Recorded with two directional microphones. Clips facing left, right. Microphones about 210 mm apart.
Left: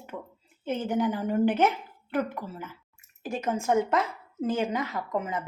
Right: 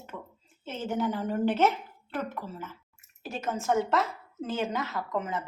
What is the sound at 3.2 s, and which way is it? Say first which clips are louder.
Speech: left 4 dB; 50° left (ahead or behind).